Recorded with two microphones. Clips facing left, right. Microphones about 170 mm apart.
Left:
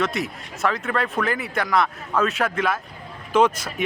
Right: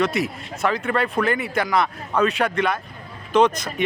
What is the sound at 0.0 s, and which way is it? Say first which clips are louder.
Speech: right 3 dB; centre (ahead or behind).